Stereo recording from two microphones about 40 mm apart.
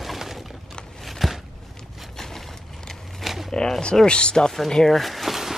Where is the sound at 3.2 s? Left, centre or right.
Centre.